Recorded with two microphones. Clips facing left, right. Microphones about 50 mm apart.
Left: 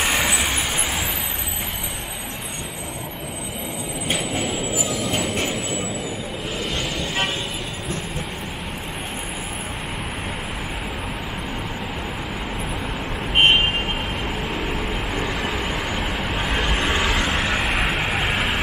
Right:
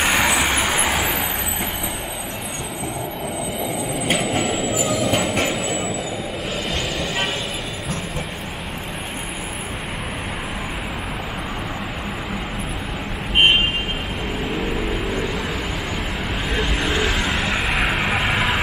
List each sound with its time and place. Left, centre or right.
0.0 s vehicle: centre
4.2 s vehicle: right
4.8 s vehicle: centre
14.5 s vehicle: centre
16.8 s vehicle: centre